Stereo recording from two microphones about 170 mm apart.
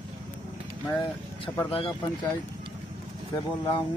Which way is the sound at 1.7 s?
30° left (ahead or behind).